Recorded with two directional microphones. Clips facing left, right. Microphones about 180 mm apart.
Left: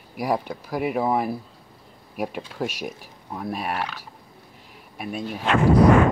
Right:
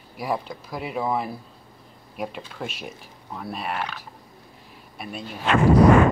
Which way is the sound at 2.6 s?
10° left (ahead or behind).